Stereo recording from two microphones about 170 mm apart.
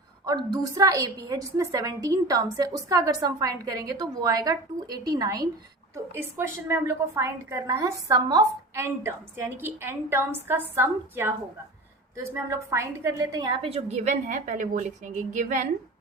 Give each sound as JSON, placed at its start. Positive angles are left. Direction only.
{"t": 0.3, "sound": "a woman's voice", "side_deg": -20}